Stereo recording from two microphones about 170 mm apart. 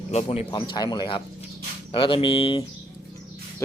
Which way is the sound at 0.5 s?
30° left (ahead or behind).